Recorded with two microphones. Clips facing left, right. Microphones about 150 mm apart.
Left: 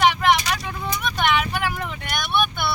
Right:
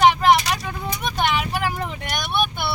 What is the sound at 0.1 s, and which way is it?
Vehicle, 35° right (ahead or behind).